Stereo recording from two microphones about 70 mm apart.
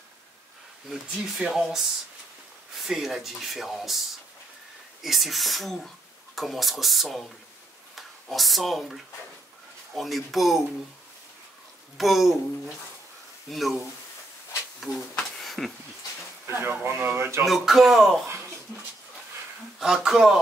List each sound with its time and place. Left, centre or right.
0.8 s speech: centre
12.0 s speech: centre
13.5 s speech: centre
14.8 s a sound: centre
16.4 s speech: right
17.5 s speech: centre
19.8 s speech: centre